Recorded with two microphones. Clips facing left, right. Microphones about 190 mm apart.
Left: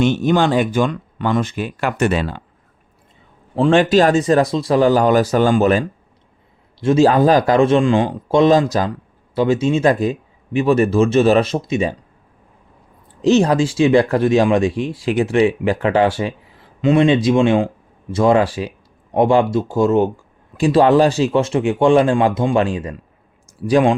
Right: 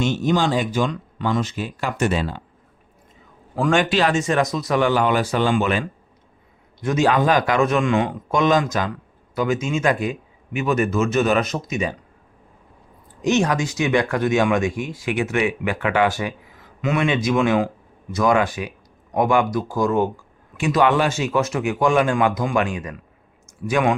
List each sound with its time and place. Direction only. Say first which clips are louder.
0.0 s speech: left 5 dB; 60° left (ahead or behind)
3.5 s speech: left 6 dB; 30° left (ahead or behind)
13.2 s speech: left 6 dB; 35° left (ahead or behind)